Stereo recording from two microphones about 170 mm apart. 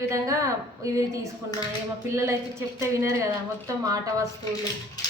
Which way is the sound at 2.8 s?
15° right (ahead or behind).